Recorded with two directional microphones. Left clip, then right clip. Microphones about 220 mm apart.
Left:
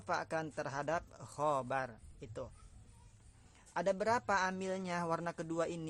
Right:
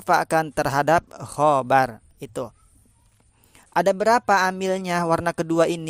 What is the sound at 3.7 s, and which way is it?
Speech, 45° right (ahead or behind).